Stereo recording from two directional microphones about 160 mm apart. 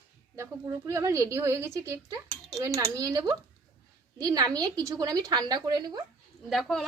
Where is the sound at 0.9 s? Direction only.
20° right (ahead or behind).